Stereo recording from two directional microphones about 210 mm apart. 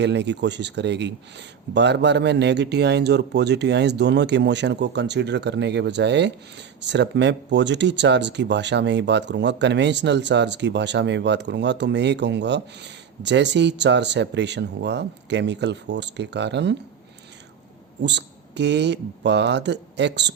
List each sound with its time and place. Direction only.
0.0 s speech: 55° right (ahead or behind)
18.0 s speech: 55° right (ahead or behind)